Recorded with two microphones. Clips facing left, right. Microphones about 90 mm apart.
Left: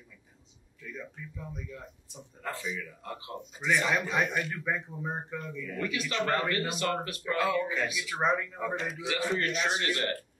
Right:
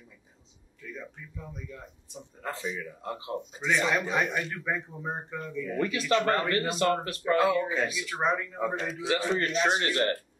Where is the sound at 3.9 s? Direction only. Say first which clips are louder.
Right 1 dB; centre (ahead or behind).